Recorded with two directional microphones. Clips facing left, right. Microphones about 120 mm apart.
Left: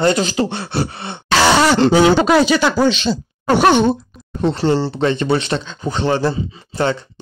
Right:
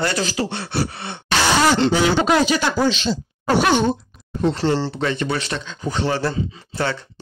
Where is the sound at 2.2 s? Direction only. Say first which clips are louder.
Left 4 dB; 90° left; by 3.8 s 70° left (ahead or behind).